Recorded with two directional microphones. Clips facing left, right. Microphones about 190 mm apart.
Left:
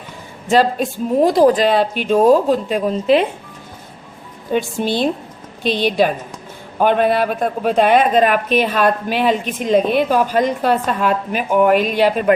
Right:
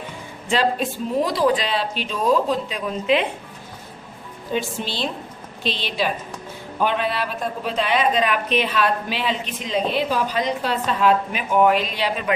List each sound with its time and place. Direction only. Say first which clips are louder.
0.5 s a man's voice: left 6 dB; 45° left (ahead or behind)
4.5 s a man's voice: left 7 dB; 50° left (ahead or behind)